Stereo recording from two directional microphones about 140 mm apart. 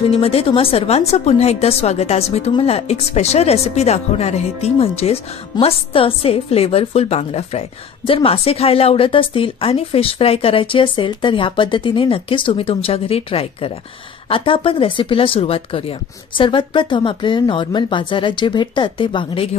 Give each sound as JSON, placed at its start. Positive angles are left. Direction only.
{"t": 0.1, "sound": "speech", "side_deg": 45}